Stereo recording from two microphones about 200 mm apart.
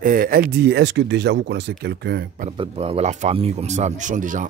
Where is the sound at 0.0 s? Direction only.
45° right (ahead or behind).